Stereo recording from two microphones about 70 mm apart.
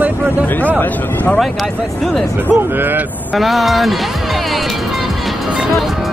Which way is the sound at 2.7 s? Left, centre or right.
Right.